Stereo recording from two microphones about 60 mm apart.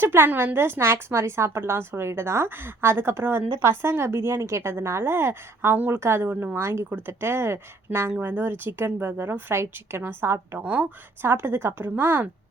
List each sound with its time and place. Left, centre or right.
0.0 s a woman's voice: right
5.7 s a woman's voice: right
6.0 s a woman's voice: right
10.6 s a woman's voice: right
11.3 s speech: right